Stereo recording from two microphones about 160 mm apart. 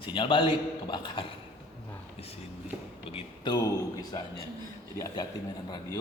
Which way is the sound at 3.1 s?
35° left (ahead or behind).